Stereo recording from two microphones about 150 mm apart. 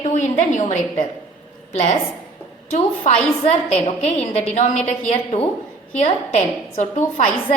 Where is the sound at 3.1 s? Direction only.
50° left (ahead or behind).